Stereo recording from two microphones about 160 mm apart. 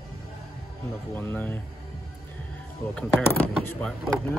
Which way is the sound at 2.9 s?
10° left (ahead or behind).